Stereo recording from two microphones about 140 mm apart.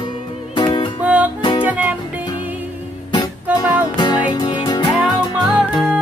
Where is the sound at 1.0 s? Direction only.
10° right (ahead or behind).